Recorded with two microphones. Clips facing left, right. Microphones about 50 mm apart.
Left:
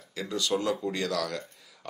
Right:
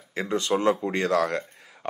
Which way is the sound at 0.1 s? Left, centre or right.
Right.